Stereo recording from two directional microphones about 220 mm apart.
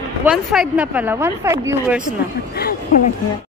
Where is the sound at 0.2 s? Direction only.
Centre (ahead or behind).